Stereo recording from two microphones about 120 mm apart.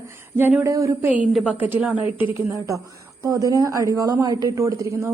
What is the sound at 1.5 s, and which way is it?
Speech, 15° right (ahead or behind).